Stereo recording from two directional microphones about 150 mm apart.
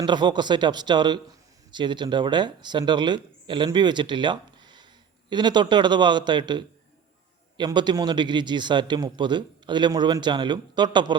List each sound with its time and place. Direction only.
0.0 s a man's voice: 30° right (ahead or behind)